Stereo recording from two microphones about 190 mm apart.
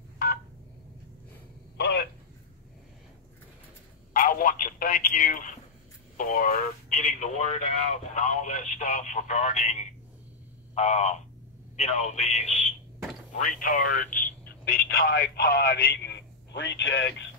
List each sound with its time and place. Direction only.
4.1 s telephone: 45° left (ahead or behind)
6.1 s speech: 45° left (ahead or behind)
10.7 s a sound: 35° left (ahead or behind)
11.7 s speech: 35° left (ahead or behind); by 17.1 s 80° left